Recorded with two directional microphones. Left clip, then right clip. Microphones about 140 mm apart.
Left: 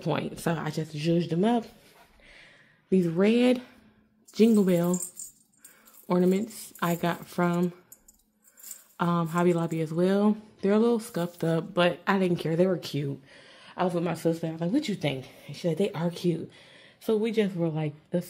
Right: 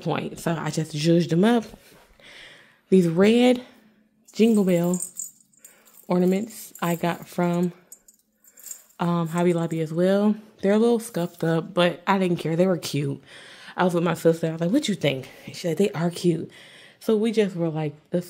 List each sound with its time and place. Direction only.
0.0 s speech: 10° right (ahead or behind)
0.9 s speech: 55° right (ahead or behind)
2.2 s a sound: 40° right (ahead or behind); by 3.7 s 15° right (ahead or behind)
4.3 s speech: 10° right (ahead or behind)
8.9 s speech: 10° right (ahead or behind)
12.7 s speech: 45° right (ahead or behind); by 18.3 s 25° right (ahead or behind)